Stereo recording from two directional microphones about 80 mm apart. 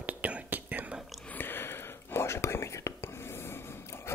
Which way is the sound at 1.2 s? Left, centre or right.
Left.